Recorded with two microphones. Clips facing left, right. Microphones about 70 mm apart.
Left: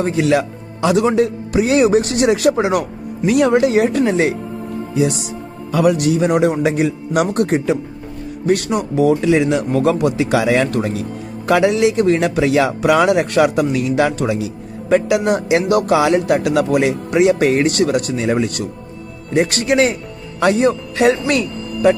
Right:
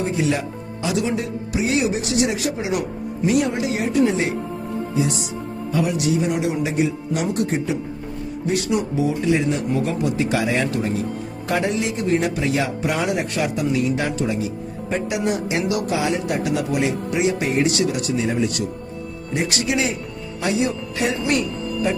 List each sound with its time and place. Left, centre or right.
0.0 s speech: left
10.7 s speech: left
11.4 s speech: left